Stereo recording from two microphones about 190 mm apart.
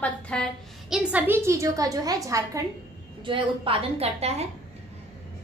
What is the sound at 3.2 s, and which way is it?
A woman's voice, 25° right (ahead or behind).